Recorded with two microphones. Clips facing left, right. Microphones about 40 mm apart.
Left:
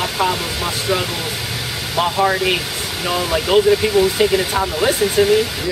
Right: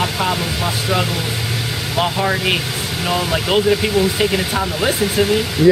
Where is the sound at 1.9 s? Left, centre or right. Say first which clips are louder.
Left 2 dB; centre.